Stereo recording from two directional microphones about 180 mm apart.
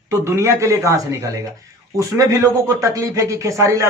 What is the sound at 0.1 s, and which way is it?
Speech, 15° right (ahead or behind).